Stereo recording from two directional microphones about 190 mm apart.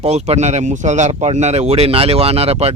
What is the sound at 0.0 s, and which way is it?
Speech, 35° right (ahead or behind).